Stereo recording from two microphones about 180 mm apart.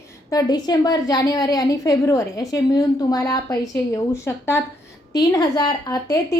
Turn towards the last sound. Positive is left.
turn(degrees=20)  # may be behind; listen again after turning